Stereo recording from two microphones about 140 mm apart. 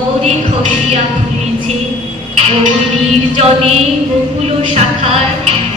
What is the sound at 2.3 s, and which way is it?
Music, 45° right (ahead or behind).